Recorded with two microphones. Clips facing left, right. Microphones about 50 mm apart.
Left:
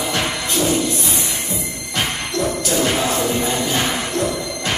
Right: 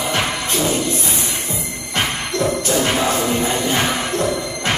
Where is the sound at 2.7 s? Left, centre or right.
Right.